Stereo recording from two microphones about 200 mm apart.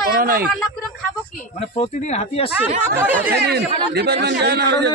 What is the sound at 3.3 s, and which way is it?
Speech, 55° right (ahead or behind).